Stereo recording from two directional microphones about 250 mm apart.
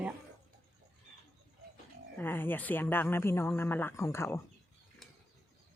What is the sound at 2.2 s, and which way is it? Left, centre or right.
Speech, centre.